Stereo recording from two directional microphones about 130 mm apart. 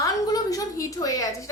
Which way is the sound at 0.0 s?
25° left (ahead or behind).